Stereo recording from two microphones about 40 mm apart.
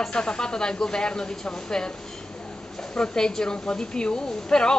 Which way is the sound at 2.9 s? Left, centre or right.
Centre.